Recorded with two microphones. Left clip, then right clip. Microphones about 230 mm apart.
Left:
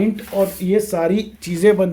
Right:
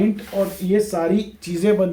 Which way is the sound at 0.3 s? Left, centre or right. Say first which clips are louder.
Left 3 dB; left.